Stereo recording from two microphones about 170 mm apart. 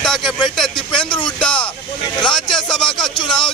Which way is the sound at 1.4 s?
5° left (ahead or behind).